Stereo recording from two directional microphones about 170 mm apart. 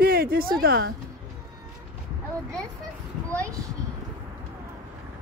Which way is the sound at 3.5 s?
20° right (ahead or behind).